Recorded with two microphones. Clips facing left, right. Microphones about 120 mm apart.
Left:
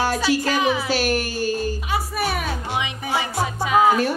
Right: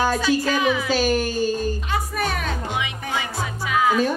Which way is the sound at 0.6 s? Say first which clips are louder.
Even; 30° left (ahead or behind).